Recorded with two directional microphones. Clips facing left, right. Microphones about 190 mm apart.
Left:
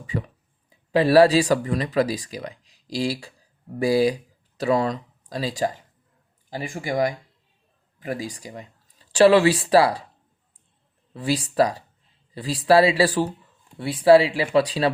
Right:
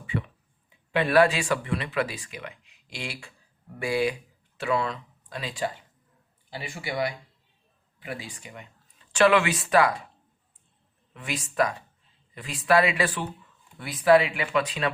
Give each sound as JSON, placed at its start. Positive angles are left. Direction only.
{"t": 0.0, "sound": "speech", "side_deg": 40}
{"t": 11.1, "sound": "speech", "side_deg": 35}